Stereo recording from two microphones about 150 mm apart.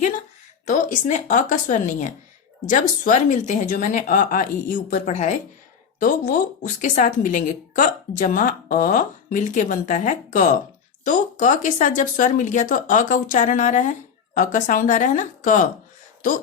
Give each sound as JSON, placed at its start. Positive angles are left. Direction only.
{"t": 0.6, "sound": "a woman's voice", "side_deg": 55}
{"t": 6.0, "sound": "a woman's voice", "side_deg": 65}